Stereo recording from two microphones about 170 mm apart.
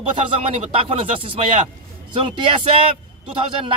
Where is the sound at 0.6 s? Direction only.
35° right (ahead or behind).